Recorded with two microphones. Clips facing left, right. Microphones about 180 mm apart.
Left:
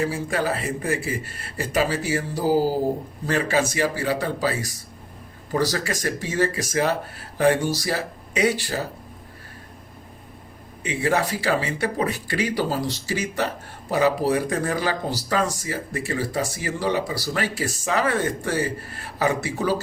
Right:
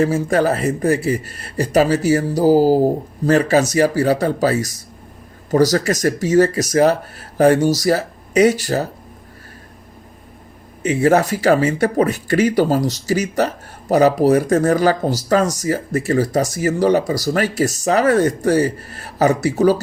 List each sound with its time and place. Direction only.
0.0 s speech: 45° right (ahead or behind)
10.8 s speech: 45° right (ahead or behind)